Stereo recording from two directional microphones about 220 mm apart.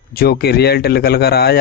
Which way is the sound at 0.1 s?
45° left (ahead or behind).